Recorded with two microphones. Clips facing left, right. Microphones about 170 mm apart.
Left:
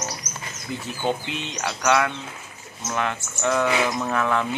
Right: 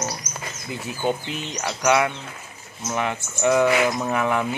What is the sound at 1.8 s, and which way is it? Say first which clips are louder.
Speech: right 2 dB; 15° right (ahead or behind).